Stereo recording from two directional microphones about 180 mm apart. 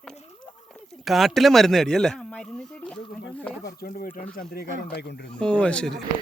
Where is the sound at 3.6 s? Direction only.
55° left (ahead or behind).